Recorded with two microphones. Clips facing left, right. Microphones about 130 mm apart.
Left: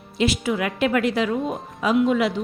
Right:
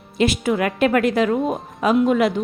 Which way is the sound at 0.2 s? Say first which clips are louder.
Right 3 dB; 50° right (ahead or behind).